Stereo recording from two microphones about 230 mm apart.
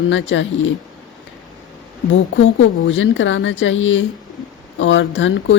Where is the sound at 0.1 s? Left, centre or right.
Left.